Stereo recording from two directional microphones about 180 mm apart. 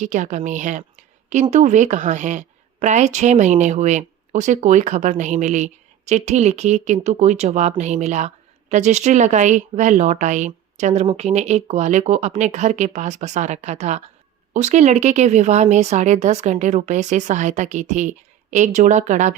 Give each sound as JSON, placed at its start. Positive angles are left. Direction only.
{"t": 0.0, "sound": "speech", "side_deg": -40}